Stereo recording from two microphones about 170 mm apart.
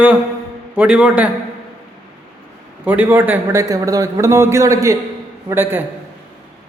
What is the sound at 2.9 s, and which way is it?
A man's voice, 10° right (ahead or behind).